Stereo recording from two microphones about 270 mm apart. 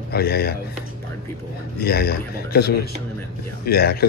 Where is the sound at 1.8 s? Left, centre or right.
Left.